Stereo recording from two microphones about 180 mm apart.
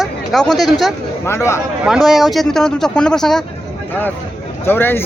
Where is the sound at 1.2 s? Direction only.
15° left (ahead or behind).